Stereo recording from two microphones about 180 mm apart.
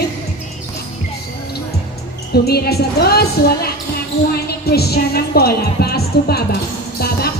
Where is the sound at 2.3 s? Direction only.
60° left (ahead or behind).